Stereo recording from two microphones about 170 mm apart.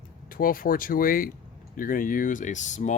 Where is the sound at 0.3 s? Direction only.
55° left (ahead or behind).